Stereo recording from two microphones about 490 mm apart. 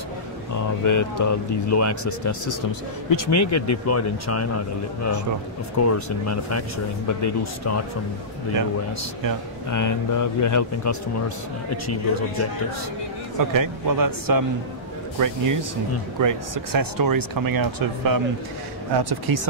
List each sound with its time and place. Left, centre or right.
0.6 s speech: left
9.7 s speech: left
13.4 s a man's voice: right